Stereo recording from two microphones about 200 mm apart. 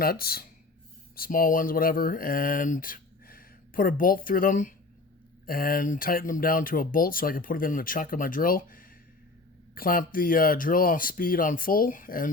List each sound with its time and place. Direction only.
0.0 s speech: 50° left (ahead or behind)